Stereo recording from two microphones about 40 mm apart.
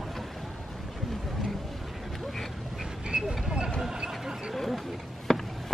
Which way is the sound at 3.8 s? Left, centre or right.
Centre.